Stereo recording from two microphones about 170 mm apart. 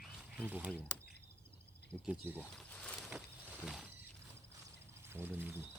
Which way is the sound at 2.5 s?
5° left (ahead or behind).